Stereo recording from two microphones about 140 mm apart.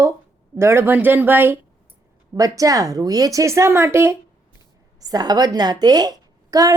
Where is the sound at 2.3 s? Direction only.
25° right (ahead or behind).